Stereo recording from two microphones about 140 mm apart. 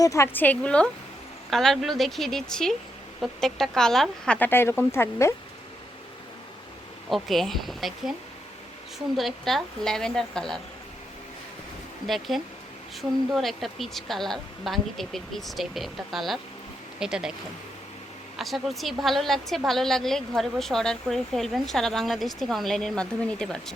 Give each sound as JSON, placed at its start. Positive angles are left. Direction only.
{"t": 0.0, "sound": "a woman's voice", "side_deg": 20}
{"t": 4.4, "sound": "a woman's voice", "side_deg": 15}
{"t": 7.1, "sound": "a woman's voice", "side_deg": 0}
{"t": 9.1, "sound": "a woman's voice", "side_deg": 0}
{"t": 12.0, "sound": "a woman's voice", "side_deg": 0}
{"t": 18.3, "sound": "a woman's voice", "side_deg": 0}